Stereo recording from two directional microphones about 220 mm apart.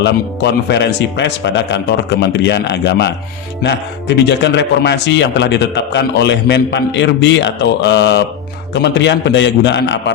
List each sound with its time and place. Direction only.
0.0 s a man's voice: 50° left (ahead or behind)